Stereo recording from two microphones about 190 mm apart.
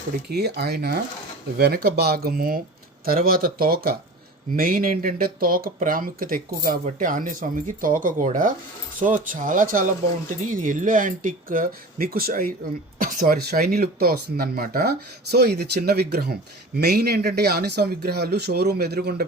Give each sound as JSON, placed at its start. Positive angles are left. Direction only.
{"t": 0.3, "sound": "speech", "side_deg": -55}